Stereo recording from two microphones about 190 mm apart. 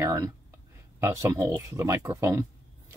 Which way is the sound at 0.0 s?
15° right (ahead or behind).